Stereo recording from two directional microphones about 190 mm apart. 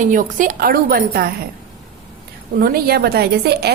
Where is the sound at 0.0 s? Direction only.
45° right (ahead or behind).